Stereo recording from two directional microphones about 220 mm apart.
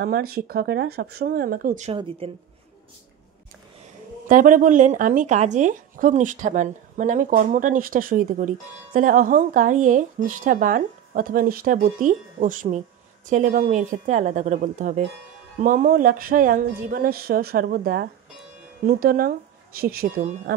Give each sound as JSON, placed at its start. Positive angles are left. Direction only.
{"t": 0.0, "sound": "a woman's voice", "side_deg": -45}
{"t": 4.3, "sound": "a woman's voice", "side_deg": -35}